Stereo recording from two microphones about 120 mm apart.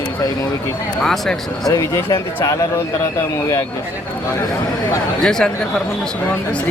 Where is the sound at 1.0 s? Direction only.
5° left (ahead or behind).